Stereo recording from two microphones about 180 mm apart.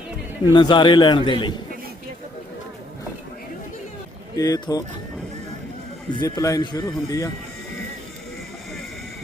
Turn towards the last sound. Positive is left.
turn(degrees=20)  # may be behind; listen again after turning